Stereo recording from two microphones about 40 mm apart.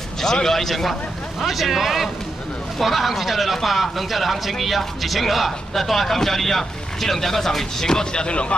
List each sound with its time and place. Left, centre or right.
0.2 s a man's voice: centre
1.4 s speech: centre
7.9 s speech: left